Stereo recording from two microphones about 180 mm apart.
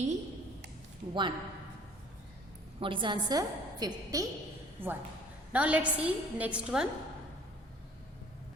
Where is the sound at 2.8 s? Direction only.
30° right (ahead or behind); by 6.9 s 5° right (ahead or behind).